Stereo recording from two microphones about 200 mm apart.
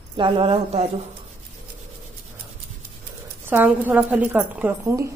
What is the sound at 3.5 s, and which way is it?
A woman's voice, 10° right (ahead or behind).